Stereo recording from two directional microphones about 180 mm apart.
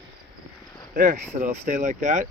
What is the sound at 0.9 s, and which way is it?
Speech, 50° right (ahead or behind).